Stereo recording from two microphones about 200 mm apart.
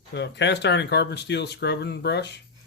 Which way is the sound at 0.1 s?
60° left (ahead or behind).